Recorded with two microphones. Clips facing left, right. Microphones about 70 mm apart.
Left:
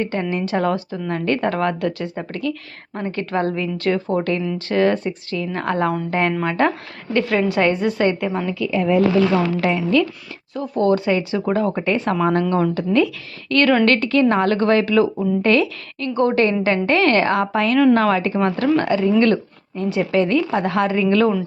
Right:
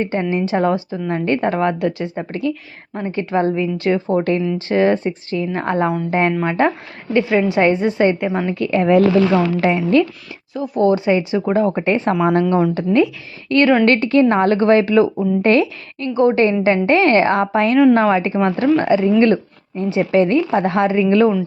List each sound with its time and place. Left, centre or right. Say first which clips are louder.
0.0 s a woman's voice: right 3 dB; right
6.3 s speech: right 2 dB; centre
6.6 s a woman's voice: right 2 dB; centre
8.5 s a woman's voice: right 4 dB; right
9.3 s a woman's voice: right 3 dB; right
10.5 s a woman's voice: right 2 dB; centre